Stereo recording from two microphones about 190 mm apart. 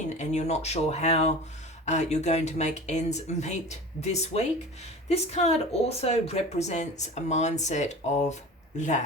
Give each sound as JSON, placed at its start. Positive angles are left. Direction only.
{"t": 0.2, "sound": "speech", "side_deg": 35}